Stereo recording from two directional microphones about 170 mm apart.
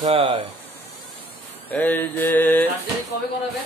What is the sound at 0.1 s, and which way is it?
Speech, 35° right (ahead or behind).